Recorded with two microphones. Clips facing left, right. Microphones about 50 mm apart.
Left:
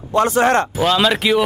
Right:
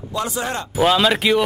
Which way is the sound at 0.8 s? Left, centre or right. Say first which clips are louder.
Even; centre.